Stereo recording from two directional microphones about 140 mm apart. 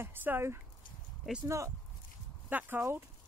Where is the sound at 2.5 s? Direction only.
15° right (ahead or behind).